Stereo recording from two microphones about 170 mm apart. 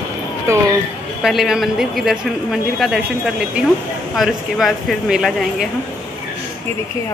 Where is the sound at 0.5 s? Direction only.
15° right (ahead or behind).